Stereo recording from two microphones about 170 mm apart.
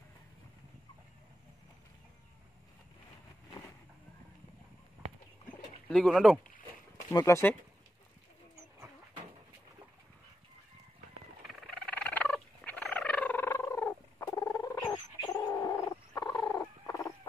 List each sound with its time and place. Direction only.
5.9 s speech: 5° left (ahead or behind)
7.1 s speech: 15° left (ahead or behind)
11.4 s fowl: 5° left (ahead or behind)